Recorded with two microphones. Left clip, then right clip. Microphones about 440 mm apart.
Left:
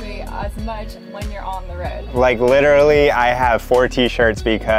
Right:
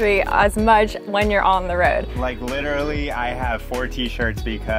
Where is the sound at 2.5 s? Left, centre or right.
Left.